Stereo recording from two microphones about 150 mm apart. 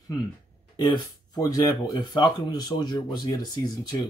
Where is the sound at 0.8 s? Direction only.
25° left (ahead or behind).